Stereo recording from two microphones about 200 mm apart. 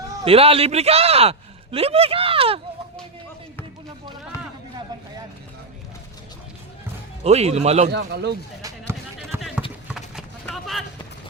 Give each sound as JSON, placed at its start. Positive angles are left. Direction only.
{"t": 0.3, "sound": "speech", "side_deg": -30}
{"t": 7.3, "sound": "speech", "side_deg": -30}
{"t": 7.9, "sound": "speech", "side_deg": -60}
{"t": 9.3, "sound": "run", "side_deg": -10}
{"t": 10.5, "sound": "a sound", "side_deg": 0}